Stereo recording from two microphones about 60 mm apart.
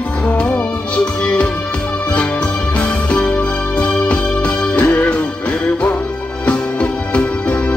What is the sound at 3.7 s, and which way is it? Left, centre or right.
Music, centre.